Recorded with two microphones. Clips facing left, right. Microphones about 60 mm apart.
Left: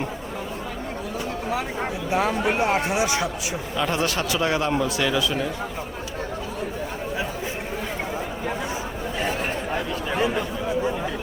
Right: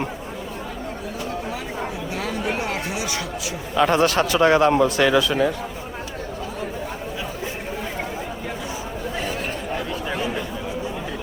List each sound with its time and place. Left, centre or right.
2.1 s speech: left
3.8 s a man's voice: right
10.2 s chatter: left